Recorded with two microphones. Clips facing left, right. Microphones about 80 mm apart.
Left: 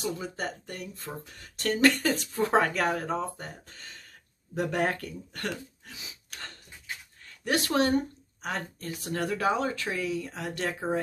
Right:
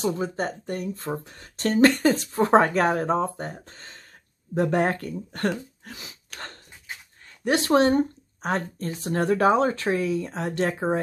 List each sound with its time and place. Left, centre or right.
0.0 s speech: right
5.9 s throat clearing: right
7.2 s speech: right